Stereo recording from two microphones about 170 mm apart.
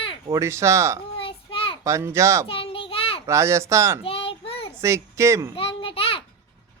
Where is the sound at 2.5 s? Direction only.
35° left (ahead or behind).